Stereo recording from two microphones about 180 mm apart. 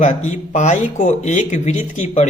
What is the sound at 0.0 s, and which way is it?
Speech, 40° left (ahead or behind).